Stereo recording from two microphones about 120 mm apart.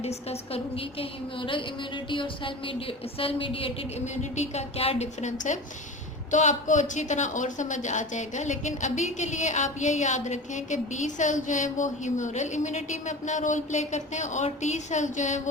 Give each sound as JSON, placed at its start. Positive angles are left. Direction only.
{"t": 0.0, "sound": "a woman's voice", "side_deg": 60}
{"t": 4.0, "sound": "a sound", "side_deg": 75}
{"t": 4.8, "sound": "a woman's voice", "side_deg": 55}
{"t": 5.2, "sound": "speech", "side_deg": 90}